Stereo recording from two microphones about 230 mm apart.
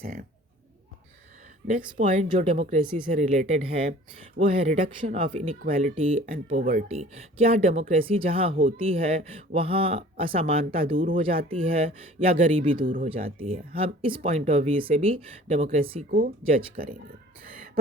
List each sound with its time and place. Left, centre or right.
0.0 s speech: right
1.6 s speech: right
16.0 s speech: right